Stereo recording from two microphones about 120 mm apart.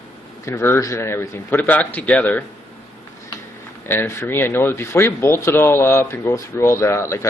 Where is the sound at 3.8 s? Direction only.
20° left (ahead or behind).